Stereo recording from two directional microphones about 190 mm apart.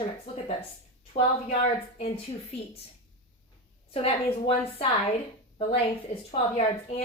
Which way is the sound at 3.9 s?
30° left (ahead or behind).